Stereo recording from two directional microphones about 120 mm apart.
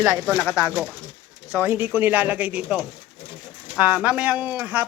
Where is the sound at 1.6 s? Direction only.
20° right (ahead or behind).